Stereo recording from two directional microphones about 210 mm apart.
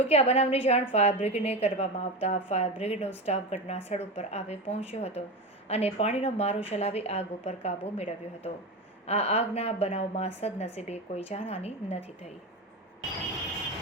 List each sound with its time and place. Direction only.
0.0 s a woman's voice: 30° left (ahead or behind)